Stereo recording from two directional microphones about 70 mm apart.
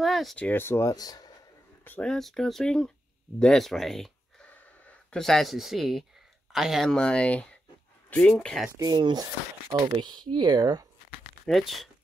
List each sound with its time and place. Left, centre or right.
0.0 s speech: centre
0.6 s speech: left
0.9 s speech: left
2.0 s speech: centre
6.9 s speech: centre
8.7 s speech: right
10.0 s speech: right
11.4 s speech: centre